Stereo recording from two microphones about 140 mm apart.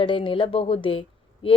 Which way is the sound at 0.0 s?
40° left (ahead or behind).